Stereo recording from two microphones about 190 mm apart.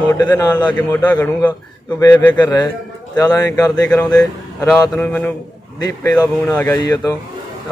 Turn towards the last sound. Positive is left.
turn(degrees=15)  # may be behind; listen again after turning